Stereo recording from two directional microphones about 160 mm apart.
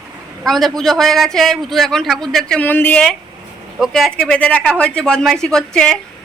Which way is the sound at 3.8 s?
Centre (ahead or behind).